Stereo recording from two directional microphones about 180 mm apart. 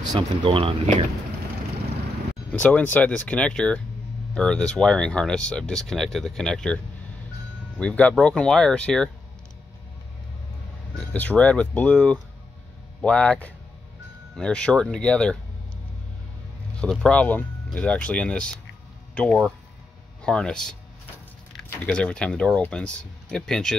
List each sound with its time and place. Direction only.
0.0 s speech: 25° right (ahead or behind)
2.5 s speech: 10° left (ahead or behind)
7.8 s speech: 5° left (ahead or behind)
11.0 s speech: 5° left (ahead or behind)
16.8 s speech: 5° left (ahead or behind)
21.8 s speech: 5° left (ahead or behind)